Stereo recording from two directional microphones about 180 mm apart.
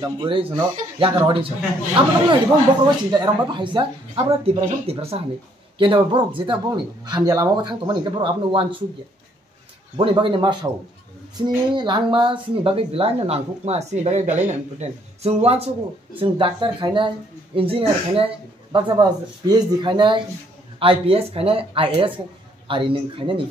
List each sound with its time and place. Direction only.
0.0 s speech: 30° right (ahead or behind)
9.9 s speech: 25° right (ahead or behind)